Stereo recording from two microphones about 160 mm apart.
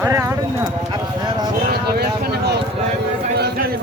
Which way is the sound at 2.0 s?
90° right.